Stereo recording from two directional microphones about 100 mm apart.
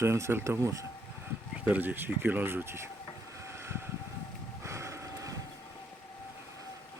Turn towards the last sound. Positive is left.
turn(degrees=-30)  # may be behind; listen again after turning